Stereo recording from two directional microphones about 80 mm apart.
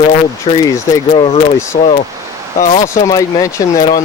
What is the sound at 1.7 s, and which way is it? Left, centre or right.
Speech, left.